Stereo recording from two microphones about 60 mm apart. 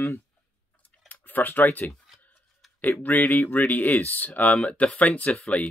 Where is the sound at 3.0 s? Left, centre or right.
Left.